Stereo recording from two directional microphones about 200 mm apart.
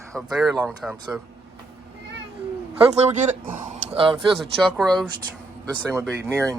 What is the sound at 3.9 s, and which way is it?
Speech, 25° right (ahead or behind).